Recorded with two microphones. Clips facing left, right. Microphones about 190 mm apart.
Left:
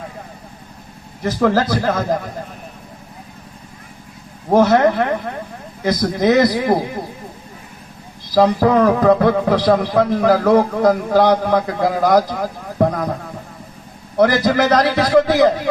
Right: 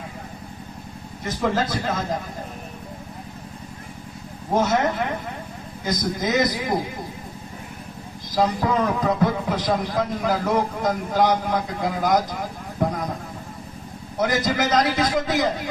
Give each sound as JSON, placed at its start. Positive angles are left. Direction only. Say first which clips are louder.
{"t": 1.2, "sound": "a man's voice", "louder": "left 7 dB", "side_deg": 70}
{"t": 4.5, "sound": "a man's voice", "louder": "left 8 dB", "side_deg": 65}
{"t": 8.4, "sound": "a man's voice", "louder": "left 8 dB", "side_deg": 65}
{"t": 14.2, "sound": "a man's voice", "louder": "left 8 dB", "side_deg": 65}